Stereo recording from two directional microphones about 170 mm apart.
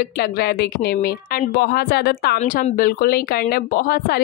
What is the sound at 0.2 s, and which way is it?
A woman's voice, 65° left (ahead or behind).